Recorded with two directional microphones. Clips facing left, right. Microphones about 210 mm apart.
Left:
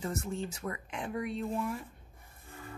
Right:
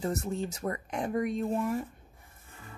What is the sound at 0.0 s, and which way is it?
Speech, 35° right (ahead or behind).